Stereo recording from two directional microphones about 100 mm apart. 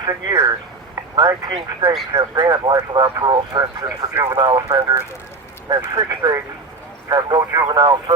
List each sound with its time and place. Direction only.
0.0 s speech: 40° right (ahead or behind)